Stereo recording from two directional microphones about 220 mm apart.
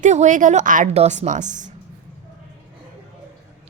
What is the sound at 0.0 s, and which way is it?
A woman's voice, 35° right (ahead or behind).